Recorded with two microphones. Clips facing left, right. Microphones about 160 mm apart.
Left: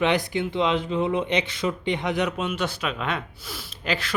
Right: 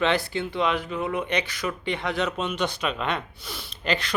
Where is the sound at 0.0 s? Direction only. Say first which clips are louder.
Left 1 dB; 15° left (ahead or behind).